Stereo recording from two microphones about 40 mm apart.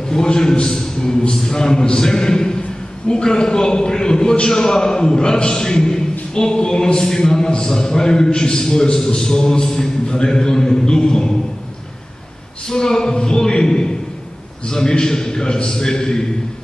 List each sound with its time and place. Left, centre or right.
0.1 s a man's voice: centre
12.6 s a man's voice: centre